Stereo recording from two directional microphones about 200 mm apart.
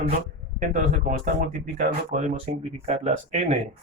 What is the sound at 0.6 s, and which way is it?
Speech, 40° right (ahead or behind).